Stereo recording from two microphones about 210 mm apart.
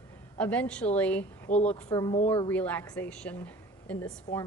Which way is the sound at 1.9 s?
15° left (ahead or behind).